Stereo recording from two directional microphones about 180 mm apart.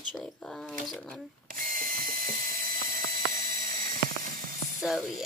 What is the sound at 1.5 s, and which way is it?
Drill, 50° right (ahead or behind).